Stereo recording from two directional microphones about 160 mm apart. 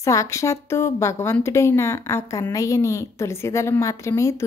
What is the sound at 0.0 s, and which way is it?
A woman's voice, 20° left (ahead or behind).